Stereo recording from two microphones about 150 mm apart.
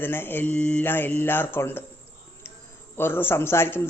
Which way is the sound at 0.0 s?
15° left (ahead or behind).